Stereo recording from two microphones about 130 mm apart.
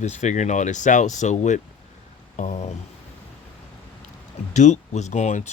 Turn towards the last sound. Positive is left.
turn(degrees=65)  # may be behind; listen again after turning